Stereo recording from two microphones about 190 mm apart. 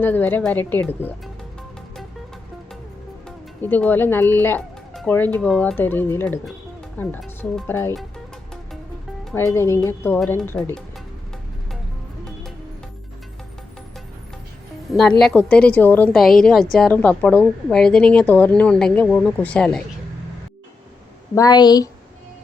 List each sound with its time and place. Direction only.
0.0 s speech: 10° left (ahead or behind)
3.2 s speech: 10° left (ahead or behind)
9.3 s speech: 15° left (ahead or behind)
12.2 s music: 5° left (ahead or behind)
14.8 s a woman's voice: centre (ahead or behind)
21.3 s a woman's voice: 20° left (ahead or behind)